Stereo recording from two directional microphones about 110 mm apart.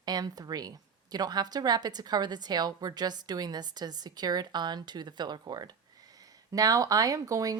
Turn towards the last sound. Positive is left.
turn(degrees=-30)  # may be behind; listen again after turning